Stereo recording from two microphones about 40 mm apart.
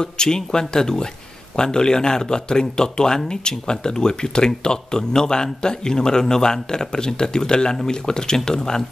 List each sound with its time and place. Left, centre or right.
0.0 s speech: centre